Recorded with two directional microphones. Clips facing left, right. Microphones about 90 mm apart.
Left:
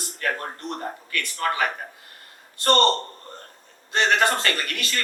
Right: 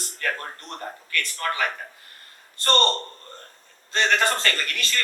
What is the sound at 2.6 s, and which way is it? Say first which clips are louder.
Speech: left 3 dB; 20° left (ahead or behind).